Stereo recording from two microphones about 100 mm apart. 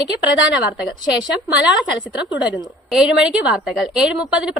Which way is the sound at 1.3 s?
10° right (ahead or behind).